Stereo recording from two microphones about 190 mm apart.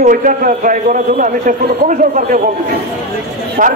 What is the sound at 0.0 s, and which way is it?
A man's voice, 45° right (ahead or behind).